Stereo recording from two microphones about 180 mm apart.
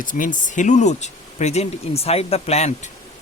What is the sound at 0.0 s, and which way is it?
Speech, 45° left (ahead or behind).